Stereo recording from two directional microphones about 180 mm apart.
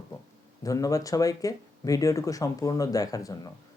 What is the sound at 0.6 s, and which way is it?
Speech, 20° left (ahead or behind).